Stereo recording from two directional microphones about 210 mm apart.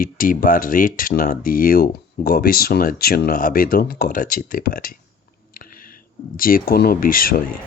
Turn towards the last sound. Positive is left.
turn(degrees=40)  # may be behind; listen again after turning